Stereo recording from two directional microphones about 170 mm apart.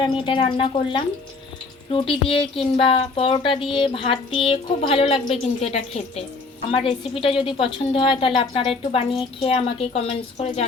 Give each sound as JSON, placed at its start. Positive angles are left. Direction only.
{"t": 0.0, "sound": "speech", "side_deg": 30}